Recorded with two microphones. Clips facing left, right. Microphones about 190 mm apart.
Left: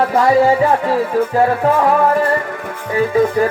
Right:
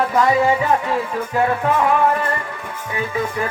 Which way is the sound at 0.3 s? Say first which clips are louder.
Left 5 dB; 35° left (ahead or behind).